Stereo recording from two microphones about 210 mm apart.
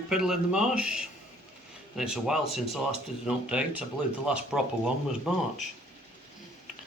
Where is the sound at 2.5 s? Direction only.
Centre (ahead or behind).